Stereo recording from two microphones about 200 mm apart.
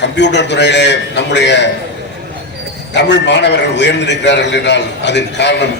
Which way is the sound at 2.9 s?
60° left (ahead or behind).